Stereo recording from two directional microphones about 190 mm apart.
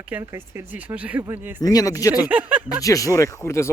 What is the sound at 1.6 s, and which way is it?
Speech, 20° left (ahead or behind).